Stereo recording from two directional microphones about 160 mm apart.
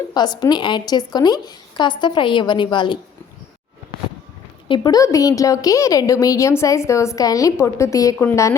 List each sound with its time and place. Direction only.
0.1 s a woman's voice: 25° left (ahead or behind)
4.7 s a woman's voice: 25° left (ahead or behind)